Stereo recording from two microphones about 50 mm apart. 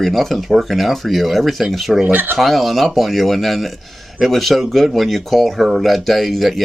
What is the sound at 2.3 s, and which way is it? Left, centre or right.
Speech, centre.